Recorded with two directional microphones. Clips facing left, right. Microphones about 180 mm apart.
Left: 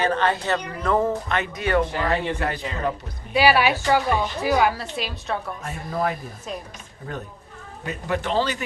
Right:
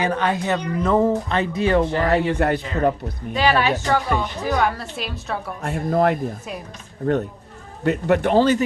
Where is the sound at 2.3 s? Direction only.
55° right (ahead or behind).